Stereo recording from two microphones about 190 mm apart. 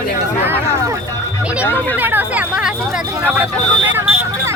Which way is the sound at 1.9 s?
10° right (ahead or behind).